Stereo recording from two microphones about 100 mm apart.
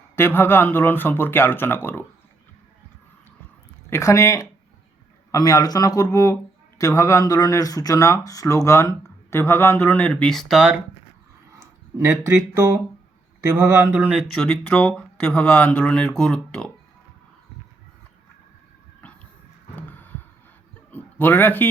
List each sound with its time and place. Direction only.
0.2 s speech: 20° left (ahead or behind)
3.8 s speech: 30° left (ahead or behind)
10.2 s speech: 5° left (ahead or behind)
11.9 s speech: 30° right (ahead or behind)
14.3 s speech: 5° left (ahead or behind)
19.7 s a sound: 20° left (ahead or behind)
20.9 s a man's voice: 15° left (ahead or behind)